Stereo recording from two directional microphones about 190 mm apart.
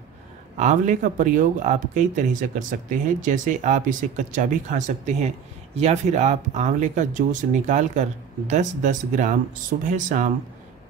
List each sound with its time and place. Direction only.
0.6 s speech: 40° right (ahead or behind)